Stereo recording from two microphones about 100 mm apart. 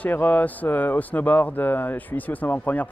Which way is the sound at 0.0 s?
15° left (ahead or behind).